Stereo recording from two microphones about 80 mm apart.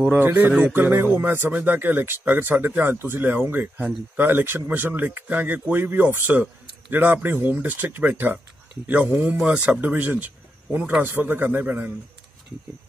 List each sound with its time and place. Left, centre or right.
0.1 s speech: right
0.7 s speech: right